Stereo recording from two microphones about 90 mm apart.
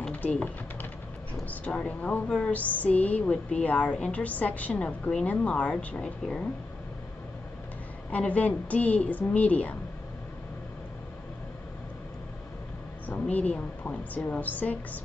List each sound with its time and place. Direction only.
0.0 s typing: 15° left (ahead or behind)
1.5 s speech: 15° left (ahead or behind)
8.1 s speech: 15° left (ahead or behind)
13.1 s a woman's voice: 15° left (ahead or behind)